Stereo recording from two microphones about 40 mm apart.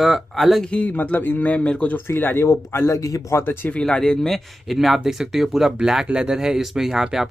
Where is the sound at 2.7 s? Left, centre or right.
Left.